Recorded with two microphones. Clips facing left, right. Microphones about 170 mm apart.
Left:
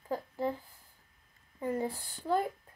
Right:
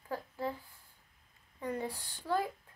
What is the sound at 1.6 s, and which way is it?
Speech, 25° left (ahead or behind).